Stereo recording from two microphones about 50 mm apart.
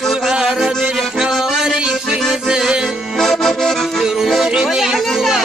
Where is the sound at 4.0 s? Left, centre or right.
Centre.